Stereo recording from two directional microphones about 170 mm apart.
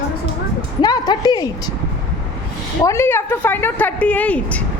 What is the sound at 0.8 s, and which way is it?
Speech, 25° left (ahead or behind).